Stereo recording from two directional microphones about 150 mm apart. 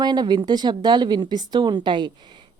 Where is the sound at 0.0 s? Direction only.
30° right (ahead or behind).